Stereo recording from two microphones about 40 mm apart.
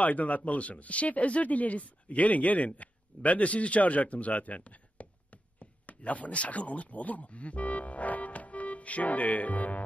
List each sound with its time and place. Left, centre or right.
0.0 s speech: left